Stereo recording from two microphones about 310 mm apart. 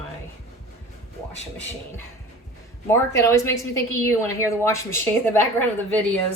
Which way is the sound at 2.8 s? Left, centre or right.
Centre.